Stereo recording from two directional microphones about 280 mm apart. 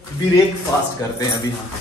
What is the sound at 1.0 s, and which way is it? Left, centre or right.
Speech, centre.